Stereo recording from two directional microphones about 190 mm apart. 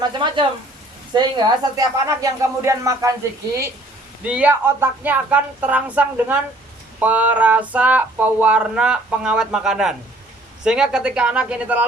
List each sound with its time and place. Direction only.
0.2 s speech: 25° right (ahead or behind)
1.7 s a sound: 15° right (ahead or behind)
10.6 s speech: 5° right (ahead or behind)